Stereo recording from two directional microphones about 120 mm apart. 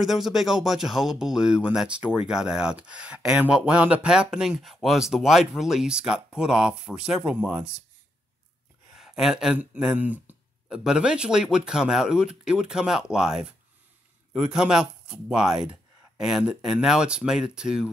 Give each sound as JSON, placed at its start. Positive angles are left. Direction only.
{"t": 0.0, "sound": "speech", "side_deg": 0}
{"t": 8.9, "sound": "speech", "side_deg": -5}